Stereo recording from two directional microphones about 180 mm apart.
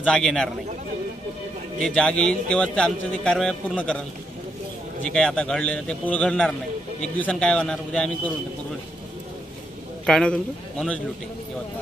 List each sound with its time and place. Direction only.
0.0 s a man's voice: 5° left (ahead or behind)
1.8 s a man's voice: 5° left (ahead or behind)
5.0 s a man's voice: 5° left (ahead or behind)
10.0 s a man's voice: 5° left (ahead or behind)